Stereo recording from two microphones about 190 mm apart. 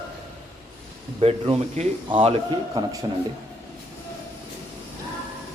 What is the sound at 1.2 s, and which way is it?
A man's voice, 35° right (ahead or behind).